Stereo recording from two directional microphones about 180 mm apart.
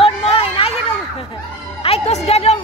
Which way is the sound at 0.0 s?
30° left (ahead or behind).